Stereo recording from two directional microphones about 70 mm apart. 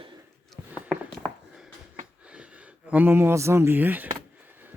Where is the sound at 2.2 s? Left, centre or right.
Centre.